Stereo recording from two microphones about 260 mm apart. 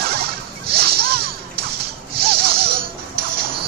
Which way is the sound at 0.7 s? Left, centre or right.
Right.